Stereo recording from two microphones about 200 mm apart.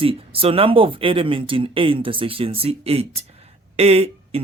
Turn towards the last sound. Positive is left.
turn(degrees=-30)  # may be behind; listen again after turning